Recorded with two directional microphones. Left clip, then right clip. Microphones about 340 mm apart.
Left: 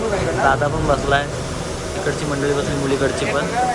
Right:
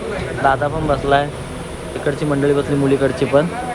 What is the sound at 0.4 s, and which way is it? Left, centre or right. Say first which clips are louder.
Speech: right 3 dB; centre.